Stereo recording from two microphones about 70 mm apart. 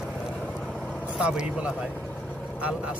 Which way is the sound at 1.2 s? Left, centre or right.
Centre.